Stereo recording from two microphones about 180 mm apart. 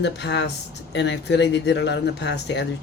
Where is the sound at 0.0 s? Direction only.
75° left (ahead or behind).